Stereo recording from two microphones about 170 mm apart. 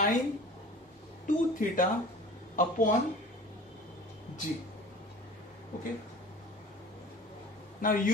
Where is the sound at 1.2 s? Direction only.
50° left (ahead or behind).